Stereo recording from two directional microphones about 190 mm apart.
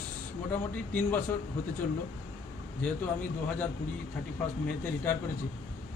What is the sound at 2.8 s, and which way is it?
Speech, 10° left (ahead or behind).